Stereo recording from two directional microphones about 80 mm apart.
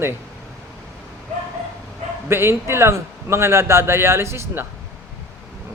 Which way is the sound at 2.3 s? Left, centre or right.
Right.